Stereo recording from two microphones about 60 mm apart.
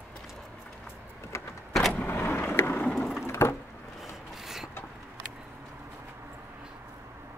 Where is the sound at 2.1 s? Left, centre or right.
Left.